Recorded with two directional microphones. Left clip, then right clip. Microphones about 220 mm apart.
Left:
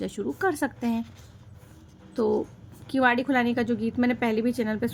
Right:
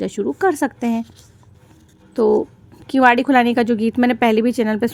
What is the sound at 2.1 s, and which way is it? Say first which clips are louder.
A woman's voice: right 10 dB; 25° right (ahead or behind).